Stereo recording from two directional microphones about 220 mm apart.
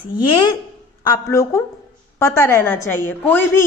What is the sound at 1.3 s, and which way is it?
A woman's voice, 15° left (ahead or behind).